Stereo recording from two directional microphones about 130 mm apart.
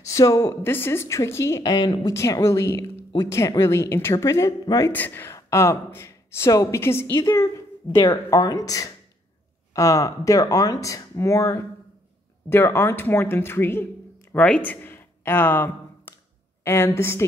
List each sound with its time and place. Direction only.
0.0 s speech: 25° left (ahead or behind)
14.3 s a sound: 10° left (ahead or behind)
16.6 s speech: 20° left (ahead or behind)